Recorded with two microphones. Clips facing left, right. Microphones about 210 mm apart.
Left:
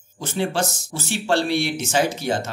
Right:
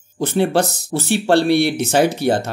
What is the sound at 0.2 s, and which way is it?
Speech, 60° right (ahead or behind).